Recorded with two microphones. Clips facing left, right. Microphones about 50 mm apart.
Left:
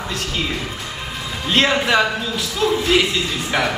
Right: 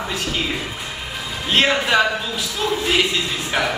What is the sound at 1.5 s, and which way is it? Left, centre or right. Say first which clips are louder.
A man's voice: left 1 dB; centre.